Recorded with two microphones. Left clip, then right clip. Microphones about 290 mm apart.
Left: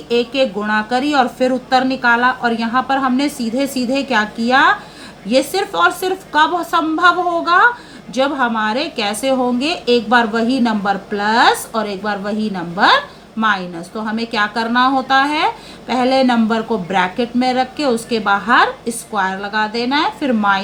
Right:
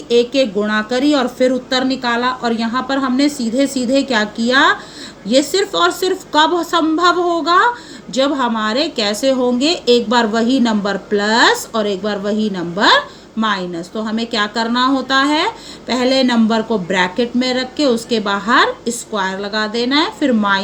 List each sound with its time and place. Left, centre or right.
1.0 s speech: centre
14.0 s speech: centre